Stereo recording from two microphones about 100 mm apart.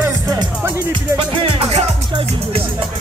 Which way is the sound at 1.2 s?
65° right (ahead or behind).